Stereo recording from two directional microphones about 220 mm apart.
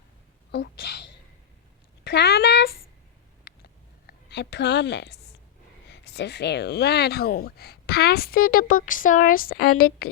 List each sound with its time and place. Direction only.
0.5 s speech: 45° left (ahead or behind)
2.0 s a sound: 50° left (ahead or behind)
5.9 s speech: 50° left (ahead or behind)